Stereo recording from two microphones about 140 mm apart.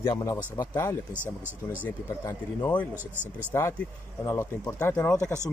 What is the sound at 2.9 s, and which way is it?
Speech, 15° right (ahead or behind).